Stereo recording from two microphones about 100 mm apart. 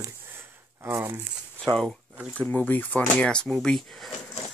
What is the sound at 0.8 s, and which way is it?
Crumpling, 25° right (ahead or behind).